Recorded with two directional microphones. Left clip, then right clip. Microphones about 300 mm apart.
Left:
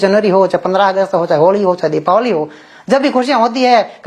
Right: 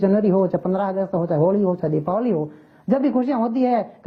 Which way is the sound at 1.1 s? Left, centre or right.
Left.